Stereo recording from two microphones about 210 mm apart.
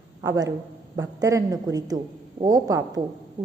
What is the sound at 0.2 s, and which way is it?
A woman's voice, 15° right (ahead or behind).